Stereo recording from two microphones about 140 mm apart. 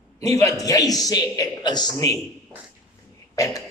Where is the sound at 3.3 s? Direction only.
25° left (ahead or behind).